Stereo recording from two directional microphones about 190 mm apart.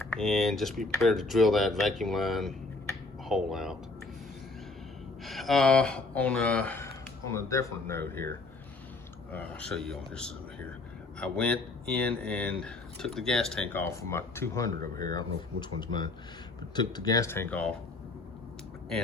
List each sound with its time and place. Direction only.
0.1 s speech: centre (ahead or behind)
5.2 s speech: centre (ahead or behind)
9.3 s speech: 5° left (ahead or behind)